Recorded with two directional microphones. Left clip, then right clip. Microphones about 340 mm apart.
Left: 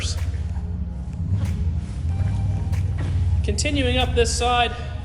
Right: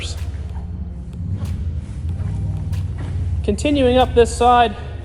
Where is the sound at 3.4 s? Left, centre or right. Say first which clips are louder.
Right 7 dB; centre.